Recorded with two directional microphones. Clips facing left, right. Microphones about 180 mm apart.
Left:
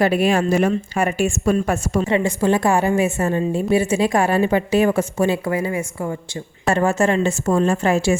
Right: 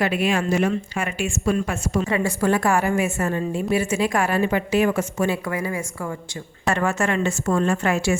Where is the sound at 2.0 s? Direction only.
25° left (ahead or behind).